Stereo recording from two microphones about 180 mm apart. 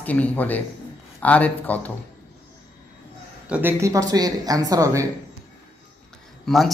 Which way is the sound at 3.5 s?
10° right (ahead or behind).